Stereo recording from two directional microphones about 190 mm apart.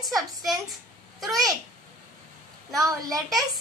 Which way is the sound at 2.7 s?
20° right (ahead or behind).